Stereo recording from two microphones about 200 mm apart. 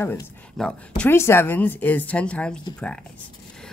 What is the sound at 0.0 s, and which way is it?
Speech, 5° left (ahead or behind).